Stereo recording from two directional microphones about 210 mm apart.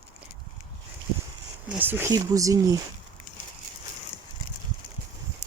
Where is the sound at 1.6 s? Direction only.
10° right (ahead or behind).